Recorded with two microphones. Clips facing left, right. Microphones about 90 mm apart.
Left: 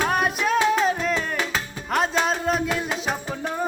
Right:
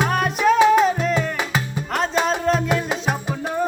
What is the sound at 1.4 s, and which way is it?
Music, 10° right (ahead or behind).